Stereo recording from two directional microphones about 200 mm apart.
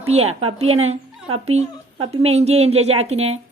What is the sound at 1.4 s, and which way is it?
Speech, 30° right (ahead or behind).